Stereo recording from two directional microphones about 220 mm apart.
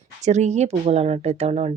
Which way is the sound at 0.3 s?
30° right (ahead or behind).